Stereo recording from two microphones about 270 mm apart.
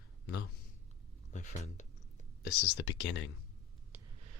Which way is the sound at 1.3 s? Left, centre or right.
Left.